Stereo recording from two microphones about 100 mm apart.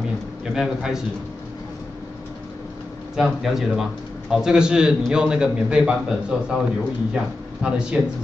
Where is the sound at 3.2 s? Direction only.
Centre (ahead or behind).